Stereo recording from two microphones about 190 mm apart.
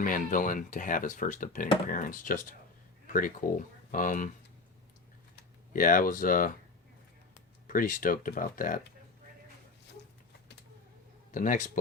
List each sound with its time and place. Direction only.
0.0 s speech: 45° left (ahead or behind)
5.4 s speech: 45° left (ahead or behind)
7.7 s speech: 45° left (ahead or behind)
11.3 s speech: 45° left (ahead or behind)